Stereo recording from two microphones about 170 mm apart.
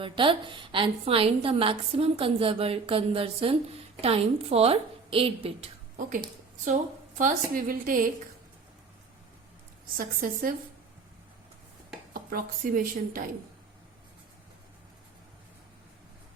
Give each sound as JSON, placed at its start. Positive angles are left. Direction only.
{"t": 0.0, "sound": "a woman's voice", "side_deg": -30}
{"t": 7.2, "sound": "a woman's voice", "side_deg": -55}
{"t": 10.0, "sound": "a woman's voice", "side_deg": -55}
{"t": 12.1, "sound": "a woman's voice", "side_deg": -55}